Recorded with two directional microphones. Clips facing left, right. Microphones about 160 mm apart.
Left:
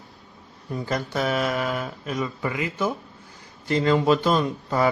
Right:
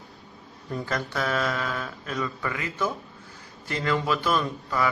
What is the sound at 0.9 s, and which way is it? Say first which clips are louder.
Mantra: left 4 dB; 20° left (ahead or behind).